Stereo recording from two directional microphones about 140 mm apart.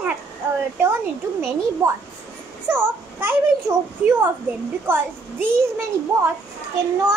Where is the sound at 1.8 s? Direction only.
20° right (ahead or behind).